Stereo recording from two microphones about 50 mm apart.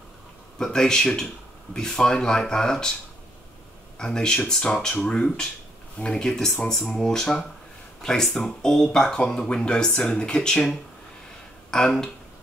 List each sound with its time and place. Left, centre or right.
0.6 s speech: centre
4.0 s speech: centre
11.7 s speech: centre